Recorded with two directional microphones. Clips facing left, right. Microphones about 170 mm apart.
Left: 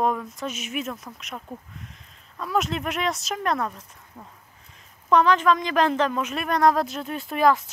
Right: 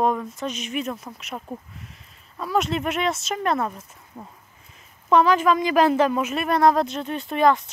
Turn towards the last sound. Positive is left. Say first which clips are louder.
# right 1 dB
turn(degrees=0)  # may be behind; listen again after turning